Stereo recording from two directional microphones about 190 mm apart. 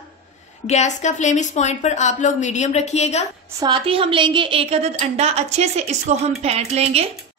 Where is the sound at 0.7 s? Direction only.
40° left (ahead or behind).